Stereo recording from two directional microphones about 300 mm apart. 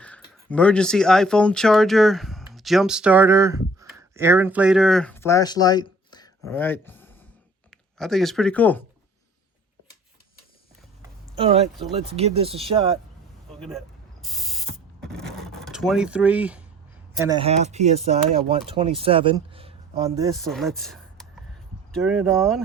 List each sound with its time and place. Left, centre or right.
0.0 s speech: centre
11.3 s speech: centre
13.5 s mechanisms: centre
15.1 s vehicle: centre
17.2 s speech: centre
20.5 s speech: centre